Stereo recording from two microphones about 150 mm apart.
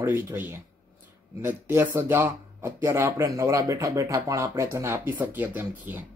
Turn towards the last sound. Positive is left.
turn(degrees=-15)  # may be behind; listen again after turning